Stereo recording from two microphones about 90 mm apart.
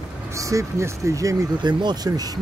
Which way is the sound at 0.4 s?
35° right (ahead or behind).